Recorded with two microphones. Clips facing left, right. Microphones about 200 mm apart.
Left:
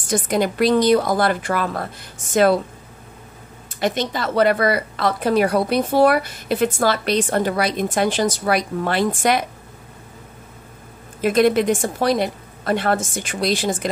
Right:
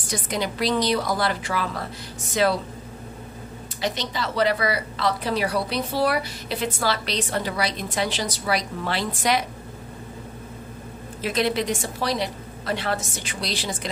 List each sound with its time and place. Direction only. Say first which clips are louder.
0.1 s a woman's voice: left 8 dB; 50° left (ahead or behind)
3.8 s a woman's voice: left 6 dB; 50° left (ahead or behind)
11.1 s a woman's voice: left 8 dB; 50° left (ahead or behind)